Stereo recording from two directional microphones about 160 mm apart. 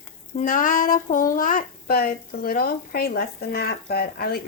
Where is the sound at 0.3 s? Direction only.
55° left (ahead or behind).